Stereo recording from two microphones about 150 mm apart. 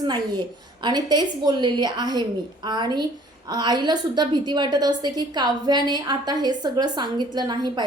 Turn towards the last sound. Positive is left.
turn(degrees=-30)  # may be behind; listen again after turning